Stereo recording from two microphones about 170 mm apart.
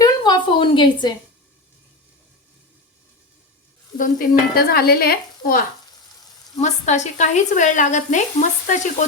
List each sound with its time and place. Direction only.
0.0 s a sound: 25° left (ahead or behind)
3.9 s speech: 55° left (ahead or behind)
6.6 s speech: 45° left (ahead or behind)